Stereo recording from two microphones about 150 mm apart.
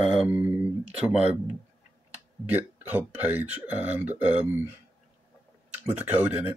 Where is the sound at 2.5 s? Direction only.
10° right (ahead or behind).